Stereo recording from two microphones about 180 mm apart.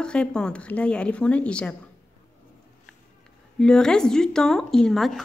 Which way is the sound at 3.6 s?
5° left (ahead or behind).